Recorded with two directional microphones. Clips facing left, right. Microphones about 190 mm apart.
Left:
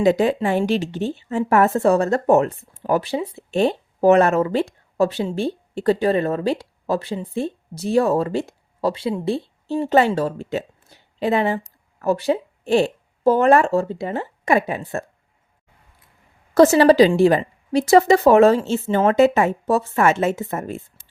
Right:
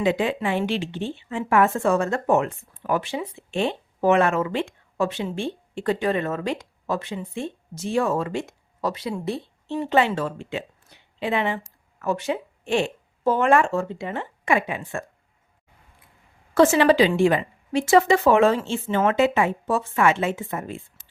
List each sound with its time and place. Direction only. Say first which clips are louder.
0.0 s speech: left 5 dB; 40° left (ahead or behind)
16.6 s speech: left 5 dB; 40° left (ahead or behind)